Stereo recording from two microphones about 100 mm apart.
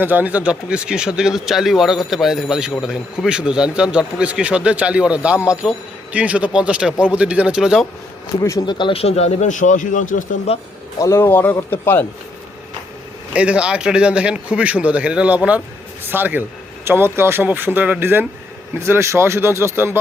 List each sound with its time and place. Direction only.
0.0 s a man's voice: 20° right (ahead or behind)
8.4 s speech: 35° left (ahead or behind)
8.6 s speech: 50° left (ahead or behind)
9.0 s speech: 90° left
10.5 s speech: 90° left
11.0 s speech: 25° left (ahead or behind)
13.3 s a man's voice: 10° right (ahead or behind)